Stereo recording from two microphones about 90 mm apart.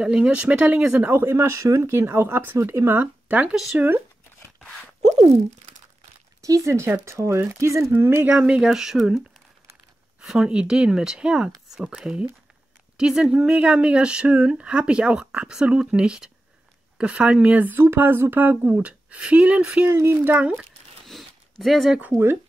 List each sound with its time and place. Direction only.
0.0 s speech: 10° right (ahead or behind); by 3.0 s 30° right (ahead or behind)
3.0 s speech: 15° right (ahead or behind)
6.4 s speech: 35° right (ahead or behind)
8.3 s speech: 10° right (ahead or behind)
10.2 s speech: 10° right (ahead or behind)
19.9 s speech: 30° right (ahead or behind)
20.2 s speech: 15° right (ahead or behind)
21.1 s a sound: centre (ahead or behind)
22.0 s speech: 25° right (ahead or behind)